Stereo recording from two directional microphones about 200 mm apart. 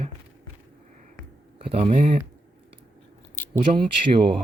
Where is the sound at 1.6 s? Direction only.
30° right (ahead or behind).